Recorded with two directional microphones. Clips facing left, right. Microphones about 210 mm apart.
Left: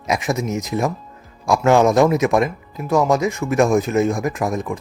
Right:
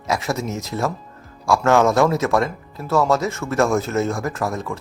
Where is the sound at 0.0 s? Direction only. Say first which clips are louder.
Left 2 dB; 20° left (ahead or behind).